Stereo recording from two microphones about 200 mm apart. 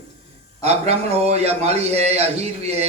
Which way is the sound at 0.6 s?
35° right (ahead or behind).